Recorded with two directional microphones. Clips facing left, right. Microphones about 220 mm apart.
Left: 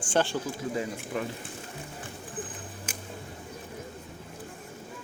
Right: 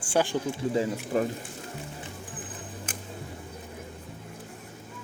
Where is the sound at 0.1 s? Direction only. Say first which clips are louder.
Right 1 dB; 10° right (ahead or behind).